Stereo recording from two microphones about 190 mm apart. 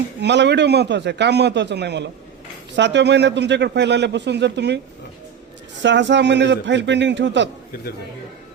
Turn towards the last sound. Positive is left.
turn(degrees=-70)  # may be behind; listen again after turning